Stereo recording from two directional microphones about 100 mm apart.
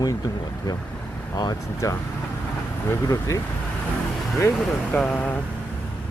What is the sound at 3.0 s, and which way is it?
Speech, 30° left (ahead or behind).